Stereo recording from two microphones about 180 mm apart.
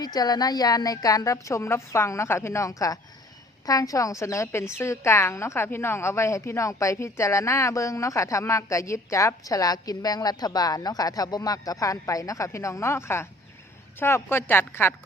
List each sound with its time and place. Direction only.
0.0 s a woman's voice: 20° left (ahead or behind)